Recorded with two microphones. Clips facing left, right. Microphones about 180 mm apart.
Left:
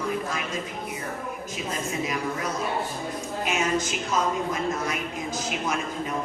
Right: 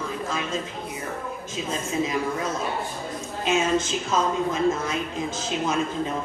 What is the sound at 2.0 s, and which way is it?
Speech, 25° right (ahead or behind).